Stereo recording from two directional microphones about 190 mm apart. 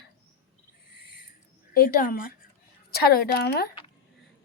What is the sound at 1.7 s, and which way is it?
A woman's voice, 50° left (ahead or behind).